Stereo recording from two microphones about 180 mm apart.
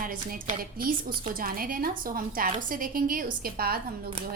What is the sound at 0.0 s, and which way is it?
A woman's voice, 50° right (ahead or behind).